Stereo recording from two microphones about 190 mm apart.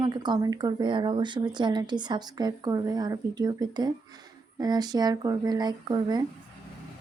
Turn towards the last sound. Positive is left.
turn(degrees=-20)  # may be behind; listen again after turning